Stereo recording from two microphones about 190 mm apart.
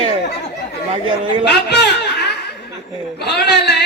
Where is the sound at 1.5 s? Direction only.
60° left (ahead or behind).